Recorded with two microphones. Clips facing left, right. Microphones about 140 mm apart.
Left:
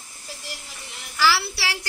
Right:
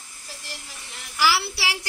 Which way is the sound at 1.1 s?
15° right (ahead or behind).